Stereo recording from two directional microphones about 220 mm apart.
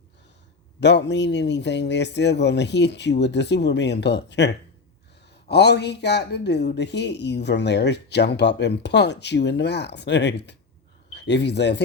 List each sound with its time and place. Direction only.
0.8 s speech: 50° left (ahead or behind)